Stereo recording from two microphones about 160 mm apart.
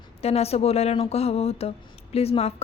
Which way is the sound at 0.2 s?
40° left (ahead or behind).